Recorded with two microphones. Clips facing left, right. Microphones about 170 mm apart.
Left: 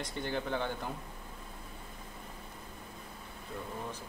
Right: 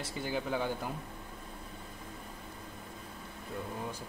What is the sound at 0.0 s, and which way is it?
Dishes, 5° right (ahead or behind).